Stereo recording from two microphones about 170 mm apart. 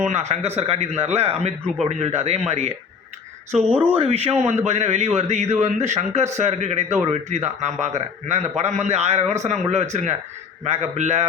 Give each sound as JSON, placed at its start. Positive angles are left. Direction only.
{"t": 0.0, "sound": "a man's voice", "side_deg": -40}